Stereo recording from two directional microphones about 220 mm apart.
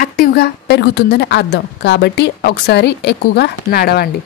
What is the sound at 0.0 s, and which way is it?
A woman's voice, 45° left (ahead or behind).